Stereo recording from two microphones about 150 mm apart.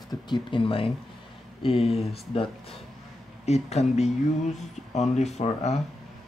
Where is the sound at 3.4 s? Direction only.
45° left (ahead or behind).